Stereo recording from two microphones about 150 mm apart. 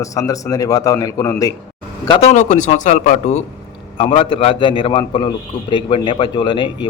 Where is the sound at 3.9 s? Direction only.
40° left (ahead or behind).